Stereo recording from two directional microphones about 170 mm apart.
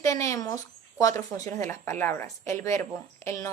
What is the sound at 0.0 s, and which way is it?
A woman's voice, 20° left (ahead or behind).